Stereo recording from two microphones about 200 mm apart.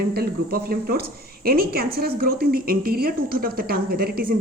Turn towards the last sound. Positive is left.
turn(degrees=-50)  # may be behind; listen again after turning